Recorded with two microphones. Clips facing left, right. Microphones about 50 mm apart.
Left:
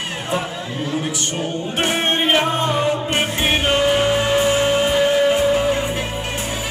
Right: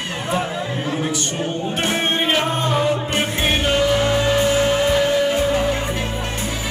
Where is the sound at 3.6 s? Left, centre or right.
Left.